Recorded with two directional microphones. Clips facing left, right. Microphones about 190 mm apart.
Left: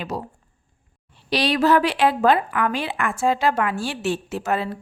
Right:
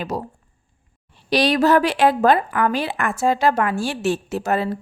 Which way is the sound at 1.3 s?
45° right (ahead or behind).